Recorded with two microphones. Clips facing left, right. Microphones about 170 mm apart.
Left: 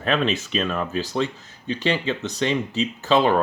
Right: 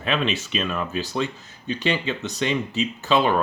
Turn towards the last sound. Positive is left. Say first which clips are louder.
# left 2 dB
turn(degrees=35)  # may be behind; listen again after turning